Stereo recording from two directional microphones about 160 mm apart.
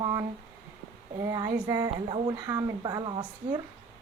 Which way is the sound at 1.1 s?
20° right (ahead or behind).